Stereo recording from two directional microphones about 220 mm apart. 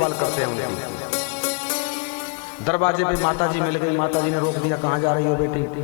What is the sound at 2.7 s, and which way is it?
A man's voice, 20° left (ahead or behind).